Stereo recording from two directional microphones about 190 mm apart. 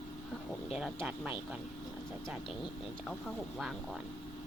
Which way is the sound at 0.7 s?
5° right (ahead or behind).